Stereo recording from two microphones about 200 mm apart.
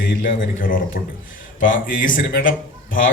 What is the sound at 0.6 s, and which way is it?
Speech, 45° left (ahead or behind).